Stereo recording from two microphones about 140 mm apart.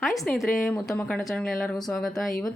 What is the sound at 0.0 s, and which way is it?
A woman's voice, centre (ahead or behind).